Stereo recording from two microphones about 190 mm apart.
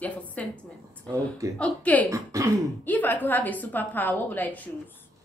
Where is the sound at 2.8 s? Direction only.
10° left (ahead or behind).